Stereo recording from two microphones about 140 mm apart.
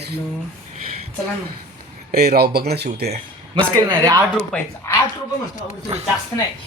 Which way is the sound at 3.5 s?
30° right (ahead or behind).